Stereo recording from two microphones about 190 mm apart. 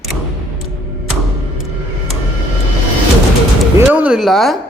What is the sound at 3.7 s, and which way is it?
Speech, 10° right (ahead or behind).